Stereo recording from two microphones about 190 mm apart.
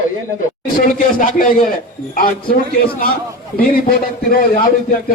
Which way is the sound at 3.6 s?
50° left (ahead or behind).